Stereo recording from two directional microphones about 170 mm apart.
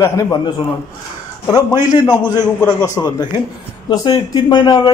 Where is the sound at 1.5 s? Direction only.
25° left (ahead or behind).